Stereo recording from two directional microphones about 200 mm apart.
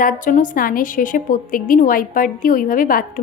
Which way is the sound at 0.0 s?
40° left (ahead or behind).